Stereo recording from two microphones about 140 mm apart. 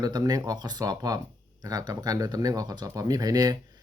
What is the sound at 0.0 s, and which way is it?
Speech, 25° right (ahead or behind).